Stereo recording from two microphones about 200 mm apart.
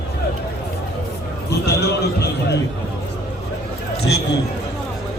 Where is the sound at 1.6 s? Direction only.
55° left (ahead or behind).